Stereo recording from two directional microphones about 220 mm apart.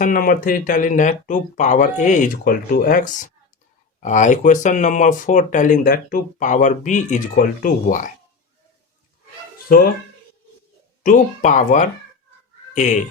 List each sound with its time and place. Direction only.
0.0 s speech: 40° left (ahead or behind)
9.6 s speech: 45° left (ahead or behind)
11.0 s speech: 35° left (ahead or behind)